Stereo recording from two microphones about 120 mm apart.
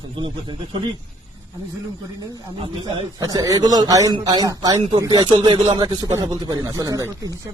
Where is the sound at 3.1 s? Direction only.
30° right (ahead or behind).